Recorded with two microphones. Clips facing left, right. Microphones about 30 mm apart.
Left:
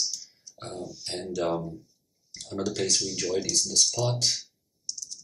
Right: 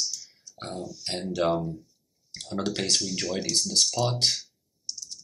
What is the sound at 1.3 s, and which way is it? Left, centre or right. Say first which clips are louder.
Speech: right 3 dB; right.